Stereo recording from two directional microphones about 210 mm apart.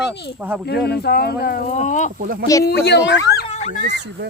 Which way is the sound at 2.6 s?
50° left (ahead or behind).